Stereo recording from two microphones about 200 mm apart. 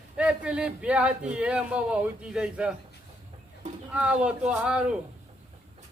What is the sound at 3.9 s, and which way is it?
A man's voice, 5° right (ahead or behind).